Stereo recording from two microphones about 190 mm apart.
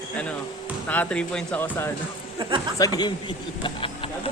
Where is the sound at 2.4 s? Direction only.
25° right (ahead or behind).